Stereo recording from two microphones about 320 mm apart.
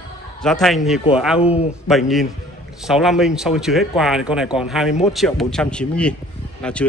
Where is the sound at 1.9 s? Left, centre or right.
Centre.